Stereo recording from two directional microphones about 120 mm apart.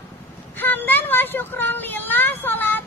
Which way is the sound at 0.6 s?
15° left (ahead or behind).